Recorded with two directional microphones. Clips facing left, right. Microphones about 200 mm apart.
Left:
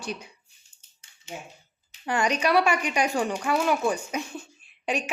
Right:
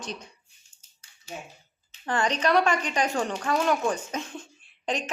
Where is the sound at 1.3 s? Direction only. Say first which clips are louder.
Even; 20° left (ahead or behind).